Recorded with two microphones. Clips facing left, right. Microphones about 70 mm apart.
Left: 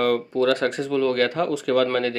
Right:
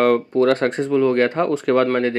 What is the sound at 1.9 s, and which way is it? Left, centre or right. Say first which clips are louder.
Speech: right 4 dB; right.